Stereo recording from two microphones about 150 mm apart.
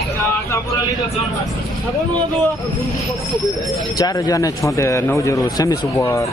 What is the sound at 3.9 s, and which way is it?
Speech, 25° left (ahead or behind).